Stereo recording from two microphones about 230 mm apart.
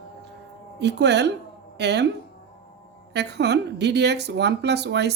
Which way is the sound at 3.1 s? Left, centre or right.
Right.